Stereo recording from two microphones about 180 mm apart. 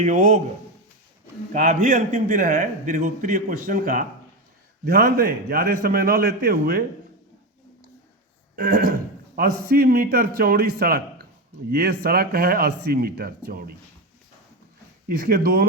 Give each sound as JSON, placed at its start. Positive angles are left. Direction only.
{"t": 0.0, "sound": "a man's voice", "side_deg": -45}
{"t": 1.5, "sound": "a man's voice", "side_deg": -45}
{"t": 4.9, "sound": "speech", "side_deg": -60}
{"t": 8.5, "sound": "a man's voice", "side_deg": -60}
{"t": 15.1, "sound": "speech", "side_deg": -55}